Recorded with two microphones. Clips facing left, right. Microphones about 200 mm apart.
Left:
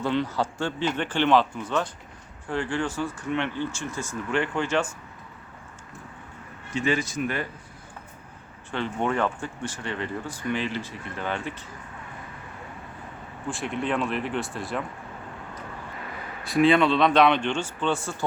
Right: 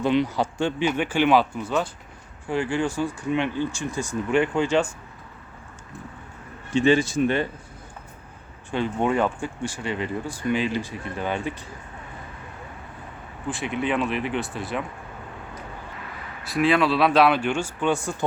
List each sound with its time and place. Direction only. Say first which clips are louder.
0.0 s speech: right 4 dB; 15° right (ahead or behind)
6.7 s speech: right 7 dB; 30° right (ahead or behind)
8.7 s speech: right 4 dB; 15° right (ahead or behind)
13.5 s speech: right 2 dB; centre (ahead or behind)
16.4 s speech: left 1 dB; centre (ahead or behind)